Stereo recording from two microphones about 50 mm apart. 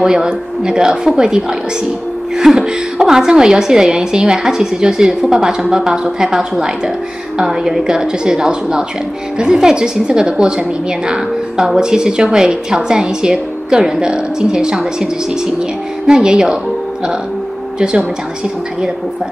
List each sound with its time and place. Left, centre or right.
0.0 s speech: centre